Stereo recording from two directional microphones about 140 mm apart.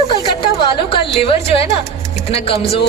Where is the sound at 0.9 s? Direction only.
40° left (ahead or behind).